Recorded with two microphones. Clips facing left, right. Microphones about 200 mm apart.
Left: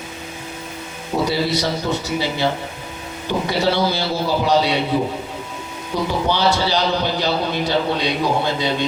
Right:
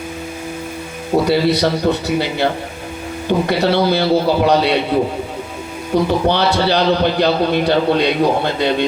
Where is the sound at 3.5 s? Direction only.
60° right (ahead or behind).